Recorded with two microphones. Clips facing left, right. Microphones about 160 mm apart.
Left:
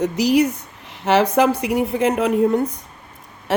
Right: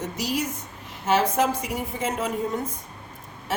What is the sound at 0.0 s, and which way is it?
A woman's voice, 70° left (ahead or behind).